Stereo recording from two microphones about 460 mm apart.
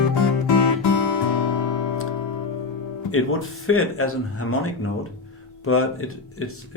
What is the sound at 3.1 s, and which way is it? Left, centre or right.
Speech, left.